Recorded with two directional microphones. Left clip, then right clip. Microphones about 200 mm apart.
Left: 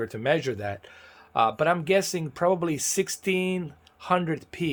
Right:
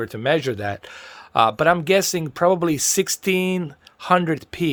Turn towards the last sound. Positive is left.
turn(degrees=-35)  # may be behind; listen again after turning